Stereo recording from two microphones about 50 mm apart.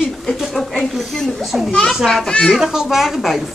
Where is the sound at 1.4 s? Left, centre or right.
Centre.